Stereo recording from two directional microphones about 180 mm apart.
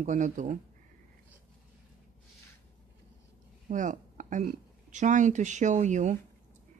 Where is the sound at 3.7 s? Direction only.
45° right (ahead or behind).